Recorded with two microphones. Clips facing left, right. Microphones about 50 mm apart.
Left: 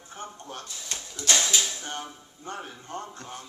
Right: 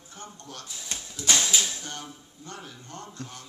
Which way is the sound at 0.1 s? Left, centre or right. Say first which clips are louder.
Left 4 dB; left.